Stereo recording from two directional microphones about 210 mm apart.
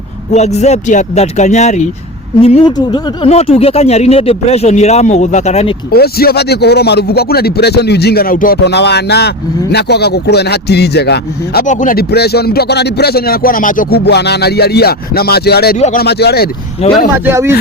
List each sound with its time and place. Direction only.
0.3 s speech: 30° left (ahead or behind)
5.9 s speech: 45° left (ahead or behind)
11.6 s speech: 35° left (ahead or behind)
16.8 s speech: 30° left (ahead or behind)
17.2 s speech: 10° right (ahead or behind)